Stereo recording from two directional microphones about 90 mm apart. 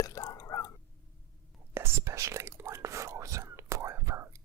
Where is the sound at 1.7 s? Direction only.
30° right (ahead or behind).